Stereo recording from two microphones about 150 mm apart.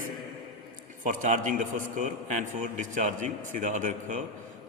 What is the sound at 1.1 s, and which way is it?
A man's voice, 60° right (ahead or behind).